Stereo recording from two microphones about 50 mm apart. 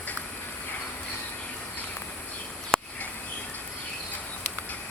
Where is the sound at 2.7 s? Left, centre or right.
Centre.